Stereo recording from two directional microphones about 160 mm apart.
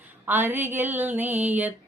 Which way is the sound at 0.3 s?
10° right (ahead or behind).